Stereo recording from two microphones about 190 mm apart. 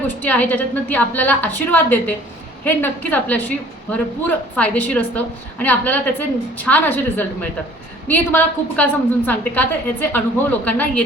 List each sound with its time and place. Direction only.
0.2 s a woman's voice: 10° left (ahead or behind)